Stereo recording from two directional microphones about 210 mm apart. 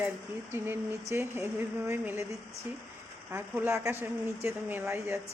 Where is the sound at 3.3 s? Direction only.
10° right (ahead or behind).